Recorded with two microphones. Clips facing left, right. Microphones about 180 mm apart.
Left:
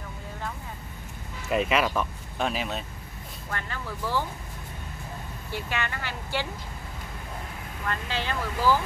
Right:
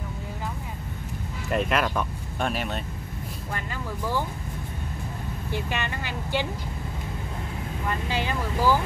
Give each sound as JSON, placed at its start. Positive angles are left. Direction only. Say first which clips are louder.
{"t": 1.5, "sound": "speech", "louder": "even", "side_deg": 0}
{"t": 3.5, "sound": "speech", "louder": "right 1 dB", "side_deg": -15}
{"t": 5.5, "sound": "speech", "louder": "right 1 dB", "side_deg": -20}
{"t": 7.8, "sound": "speech", "louder": "right 2 dB", "side_deg": -10}